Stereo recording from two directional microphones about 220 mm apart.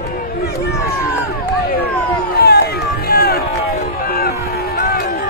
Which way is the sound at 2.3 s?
45° left (ahead or behind).